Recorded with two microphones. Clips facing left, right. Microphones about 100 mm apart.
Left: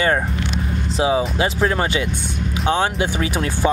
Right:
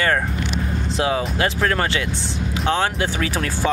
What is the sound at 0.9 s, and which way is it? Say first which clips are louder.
Speech: left 3 dB; 15° left (ahead or behind).